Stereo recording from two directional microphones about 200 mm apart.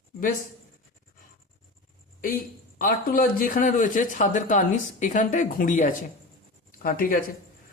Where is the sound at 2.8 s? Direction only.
45° left (ahead or behind).